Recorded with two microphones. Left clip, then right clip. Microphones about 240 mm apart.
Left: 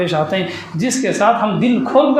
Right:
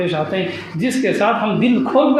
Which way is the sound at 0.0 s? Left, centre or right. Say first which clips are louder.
Left 2 dB; left.